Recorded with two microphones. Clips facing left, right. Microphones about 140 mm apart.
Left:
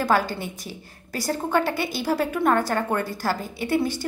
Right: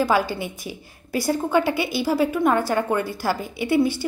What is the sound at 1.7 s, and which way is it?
A woman's voice, 10° right (ahead or behind).